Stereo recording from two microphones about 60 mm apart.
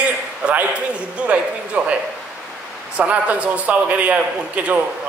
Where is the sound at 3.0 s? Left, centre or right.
Right.